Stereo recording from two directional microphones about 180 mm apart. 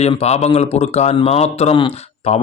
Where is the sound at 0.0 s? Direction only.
35° left (ahead or behind).